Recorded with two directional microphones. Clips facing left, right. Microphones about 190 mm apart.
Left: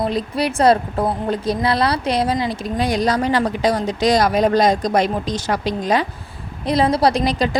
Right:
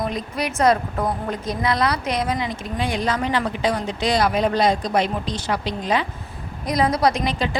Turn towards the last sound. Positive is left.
turn(degrees=40)  # may be behind; listen again after turning